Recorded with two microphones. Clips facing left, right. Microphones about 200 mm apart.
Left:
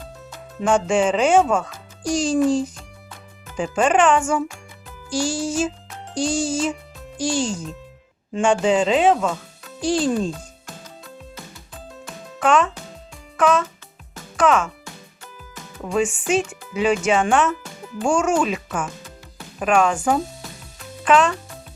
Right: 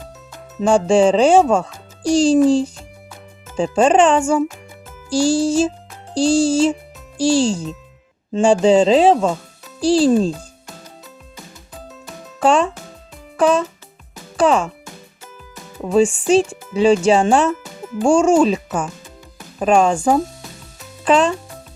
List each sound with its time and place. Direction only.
0.6 s a child's voice: 30° right (ahead or behind)
12.4 s a child's voice: 30° right (ahead or behind)
15.8 s a child's voice: 30° right (ahead or behind)